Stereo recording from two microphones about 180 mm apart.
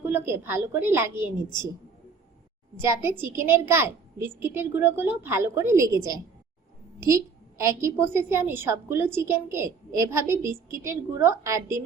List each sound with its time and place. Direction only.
0.0 s a woman's voice: 10° right (ahead or behind)
1.1 s a woman's voice: 25° left (ahead or behind)
2.7 s a woman's voice: 15° right (ahead or behind)